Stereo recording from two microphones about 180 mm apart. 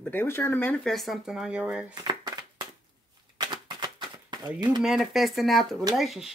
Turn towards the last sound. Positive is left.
turn(degrees=0)  # may be behind; listen again after turning